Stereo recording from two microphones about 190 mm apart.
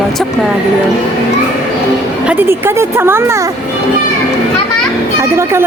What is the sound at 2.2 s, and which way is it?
A woman's voice, 10° right (ahead or behind).